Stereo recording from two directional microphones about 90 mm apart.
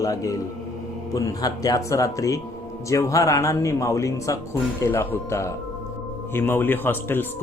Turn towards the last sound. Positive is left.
turn(degrees=25)  # may be behind; listen again after turning